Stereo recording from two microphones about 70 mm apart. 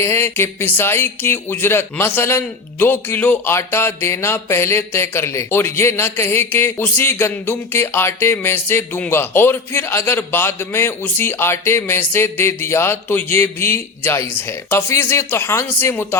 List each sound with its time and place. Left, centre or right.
0.0 s speech: left
3.5 s speech: left